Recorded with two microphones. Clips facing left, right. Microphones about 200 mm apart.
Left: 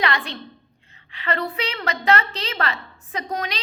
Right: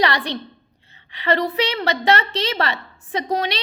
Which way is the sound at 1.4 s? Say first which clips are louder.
Right 6 dB; 35° right (ahead or behind).